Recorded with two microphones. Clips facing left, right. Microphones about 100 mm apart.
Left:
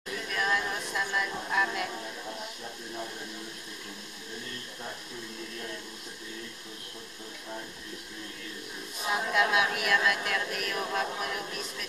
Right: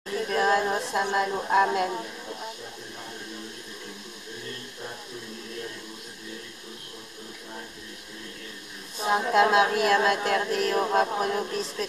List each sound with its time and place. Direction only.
0.1 s a sound: 35° right (ahead or behind)
1.1 s a woman's voice: 40° right (ahead or behind)
9.0 s a woman's voice: 35° right (ahead or behind)